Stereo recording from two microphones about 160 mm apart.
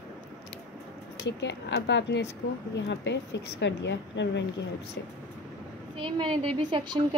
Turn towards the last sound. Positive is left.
turn(degrees=-30)  # may be behind; listen again after turning